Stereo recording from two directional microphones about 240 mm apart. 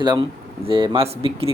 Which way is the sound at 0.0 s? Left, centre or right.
Centre.